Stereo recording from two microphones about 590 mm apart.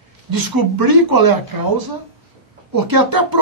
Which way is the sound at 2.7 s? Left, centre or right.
Right.